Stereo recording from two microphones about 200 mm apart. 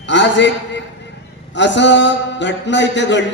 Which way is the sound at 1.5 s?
65° left (ahead or behind).